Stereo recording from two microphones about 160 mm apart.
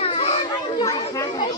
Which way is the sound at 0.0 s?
35° left (ahead or behind).